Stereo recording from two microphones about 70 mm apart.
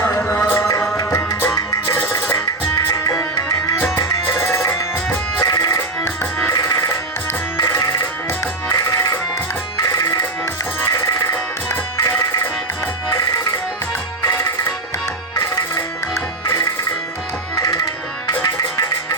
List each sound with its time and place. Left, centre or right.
0.3 s music: left
2.9 s music: left
3.9 s music: left
5.4 s music: left
10.9 s music: left
16.5 s music: left
17.5 s tabla: left
18.4 s music: left